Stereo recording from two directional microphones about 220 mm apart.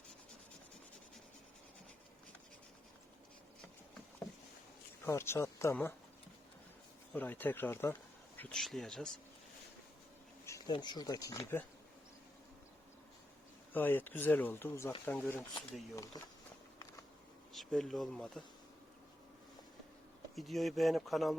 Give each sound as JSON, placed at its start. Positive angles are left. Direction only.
{"t": 5.0, "sound": "speech", "side_deg": 10}
{"t": 7.1, "sound": "speech", "side_deg": 10}
{"t": 10.4, "sound": "speech", "side_deg": 15}
{"t": 13.7, "sound": "speech", "side_deg": 10}
{"t": 17.5, "sound": "speech", "side_deg": 0}
{"t": 20.3, "sound": "speech", "side_deg": 0}